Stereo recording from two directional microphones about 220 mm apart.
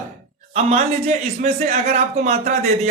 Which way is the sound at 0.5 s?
30° right (ahead or behind).